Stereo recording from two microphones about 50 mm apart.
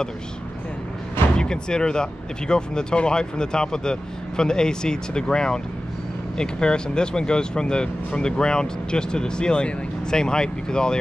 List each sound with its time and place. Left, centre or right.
1.3 s speech: centre